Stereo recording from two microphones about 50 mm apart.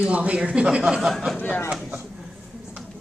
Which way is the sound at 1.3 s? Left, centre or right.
Left.